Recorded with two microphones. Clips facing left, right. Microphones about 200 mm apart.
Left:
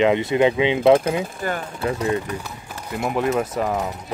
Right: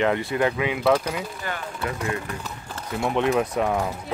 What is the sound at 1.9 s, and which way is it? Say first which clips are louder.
Speech: left 7 dB; 25° left (ahead or behind).